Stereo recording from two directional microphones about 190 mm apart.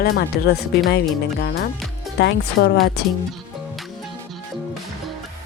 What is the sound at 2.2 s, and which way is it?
Speech, 65° left (ahead or behind).